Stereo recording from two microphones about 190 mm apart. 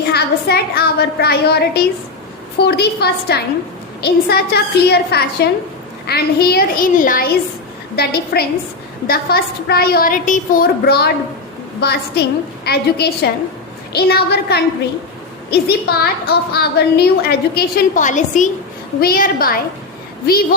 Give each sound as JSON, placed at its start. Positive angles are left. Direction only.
{"t": 0.1, "sound": "a woman's voice", "side_deg": 55}
{"t": 18.9, "sound": "a woman's voice", "side_deg": 50}